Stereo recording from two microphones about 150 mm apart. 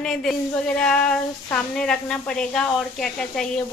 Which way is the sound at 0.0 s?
5° left (ahead or behind).